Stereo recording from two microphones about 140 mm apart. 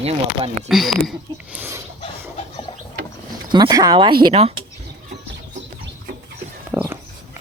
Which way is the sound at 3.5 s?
30° right (ahead or behind).